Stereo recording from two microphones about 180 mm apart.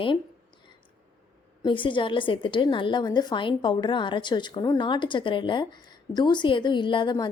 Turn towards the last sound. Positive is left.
turn(degrees=25)  # may be behind; listen again after turning